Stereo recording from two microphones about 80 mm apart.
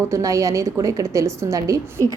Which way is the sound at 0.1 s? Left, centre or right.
Right.